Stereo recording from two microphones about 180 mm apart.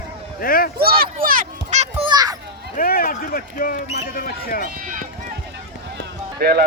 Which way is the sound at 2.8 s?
55° left (ahead or behind).